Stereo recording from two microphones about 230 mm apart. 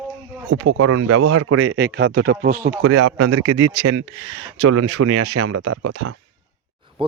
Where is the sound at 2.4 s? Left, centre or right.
Right.